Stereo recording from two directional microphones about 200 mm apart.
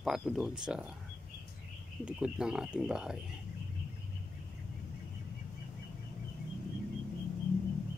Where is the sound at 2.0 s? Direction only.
5° right (ahead or behind).